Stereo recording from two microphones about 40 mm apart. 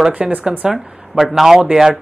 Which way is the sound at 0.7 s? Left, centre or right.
Centre.